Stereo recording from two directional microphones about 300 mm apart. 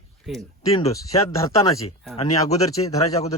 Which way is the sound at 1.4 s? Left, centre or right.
Centre.